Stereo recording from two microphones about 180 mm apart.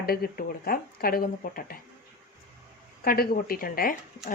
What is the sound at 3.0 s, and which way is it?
Speech, 55° left (ahead or behind).